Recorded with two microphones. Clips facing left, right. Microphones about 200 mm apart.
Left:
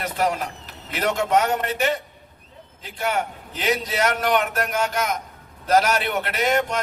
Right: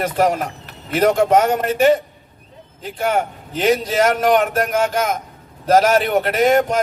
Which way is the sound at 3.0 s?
45° right (ahead or behind).